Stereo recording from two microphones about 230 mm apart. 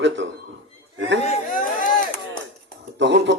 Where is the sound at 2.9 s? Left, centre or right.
Right.